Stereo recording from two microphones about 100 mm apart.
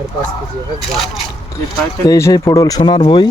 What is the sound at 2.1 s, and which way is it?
Speech, 30° left (ahead or behind).